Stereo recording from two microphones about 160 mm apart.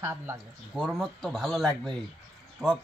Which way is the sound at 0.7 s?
5° left (ahead or behind).